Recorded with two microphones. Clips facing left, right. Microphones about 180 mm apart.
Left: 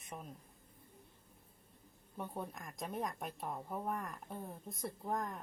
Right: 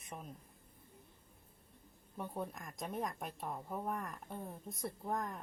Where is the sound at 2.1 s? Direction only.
Centre (ahead or behind).